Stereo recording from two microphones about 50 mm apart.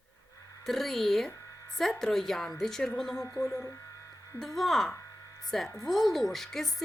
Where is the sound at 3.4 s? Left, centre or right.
Left.